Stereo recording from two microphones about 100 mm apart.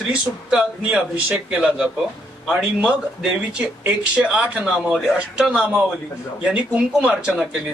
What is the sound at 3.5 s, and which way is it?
Speech, 10° right (ahead or behind).